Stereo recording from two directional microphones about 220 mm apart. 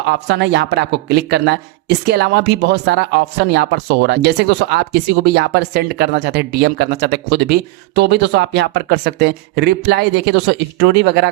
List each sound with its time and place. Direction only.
0.1 s speech: 50° right (ahead or behind)